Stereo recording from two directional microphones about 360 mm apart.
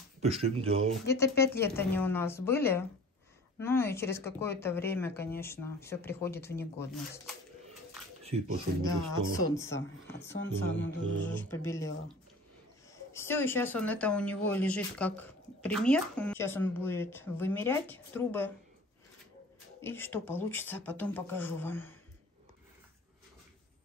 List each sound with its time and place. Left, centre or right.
0.2 s speech: centre
1.1 s speech: centre
8.8 s speech: centre
10.4 s speech: left
11.4 s speech: centre
13.1 s speech: centre
19.8 s speech: centre